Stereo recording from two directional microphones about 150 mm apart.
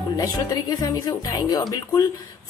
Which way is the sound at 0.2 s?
25° left (ahead or behind).